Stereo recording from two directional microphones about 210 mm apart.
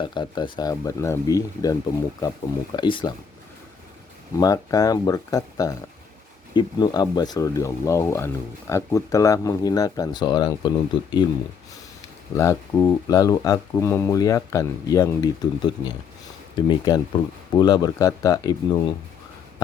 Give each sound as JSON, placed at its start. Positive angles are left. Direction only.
{"t": 0.0, "sound": "speech", "side_deg": 20}
{"t": 2.7, "sound": "speech", "side_deg": 20}
{"t": 4.4, "sound": "speech", "side_deg": 15}
{"t": 12.3, "sound": "speech", "side_deg": 20}